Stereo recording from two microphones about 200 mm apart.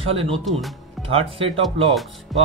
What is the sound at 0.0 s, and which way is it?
Speech, 30° right (ahead or behind).